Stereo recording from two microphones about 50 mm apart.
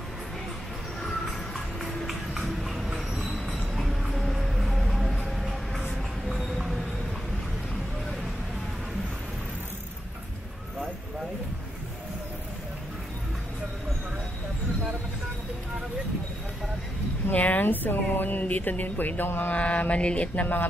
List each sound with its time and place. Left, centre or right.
1.8 s a sound: centre
2.9 s train: centre
3.7 s music: centre
17.3 s speech: left
19.5 s mantra: left